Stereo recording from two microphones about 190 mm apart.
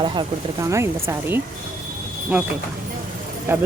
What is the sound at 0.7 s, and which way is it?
Speech, 15° right (ahead or behind).